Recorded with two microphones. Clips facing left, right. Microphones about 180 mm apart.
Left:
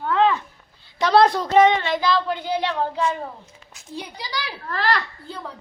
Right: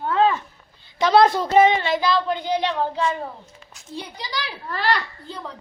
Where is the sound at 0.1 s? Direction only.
35° right (ahead or behind).